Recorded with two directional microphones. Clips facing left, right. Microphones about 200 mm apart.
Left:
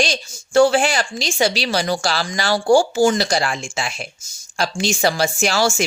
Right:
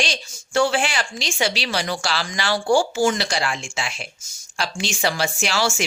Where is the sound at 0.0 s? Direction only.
40° left (ahead or behind).